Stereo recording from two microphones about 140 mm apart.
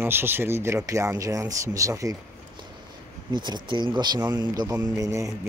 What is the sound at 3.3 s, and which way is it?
A man's voice, 35° right (ahead or behind).